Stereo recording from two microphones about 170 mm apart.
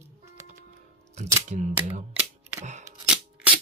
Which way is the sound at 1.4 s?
45° right (ahead or behind).